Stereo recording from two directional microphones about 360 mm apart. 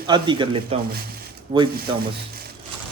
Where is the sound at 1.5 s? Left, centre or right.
Centre.